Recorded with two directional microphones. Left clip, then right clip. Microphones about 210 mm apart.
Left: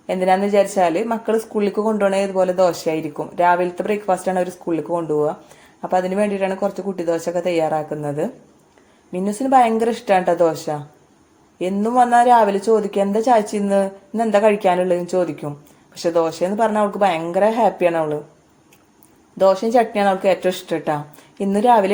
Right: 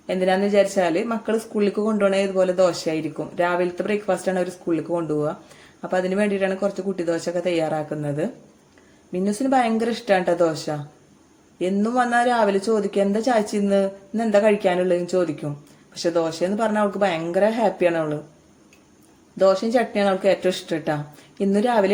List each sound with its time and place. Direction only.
0.1 s speech: centre (ahead or behind)
19.4 s speech: centre (ahead or behind)